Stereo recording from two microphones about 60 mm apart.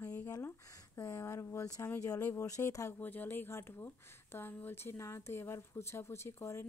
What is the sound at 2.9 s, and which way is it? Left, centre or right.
Speech, left.